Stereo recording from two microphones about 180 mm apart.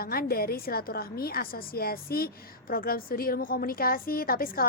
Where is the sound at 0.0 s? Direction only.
55° left (ahead or behind).